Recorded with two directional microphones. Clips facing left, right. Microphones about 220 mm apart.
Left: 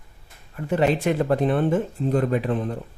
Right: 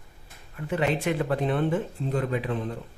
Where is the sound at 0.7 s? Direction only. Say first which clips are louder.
Left 5 dB; 40° left (ahead or behind).